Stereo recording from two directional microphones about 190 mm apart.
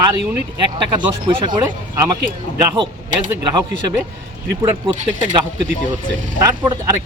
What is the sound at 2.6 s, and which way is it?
Speech, 20° right (ahead or behind).